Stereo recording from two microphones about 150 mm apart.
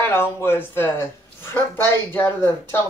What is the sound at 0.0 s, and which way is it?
Speech, 15° left (ahead or behind).